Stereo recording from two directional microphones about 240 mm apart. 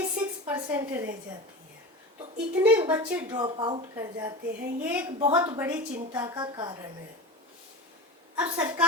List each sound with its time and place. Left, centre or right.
0.0 s a sound: centre
2.6 s a woman's voice: centre
3.3 s a woman's voice: centre
8.4 s a woman's voice: centre